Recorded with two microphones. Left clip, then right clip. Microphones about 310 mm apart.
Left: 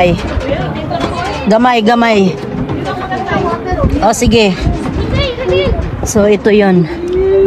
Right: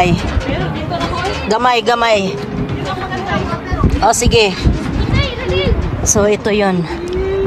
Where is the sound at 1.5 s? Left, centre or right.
Centre.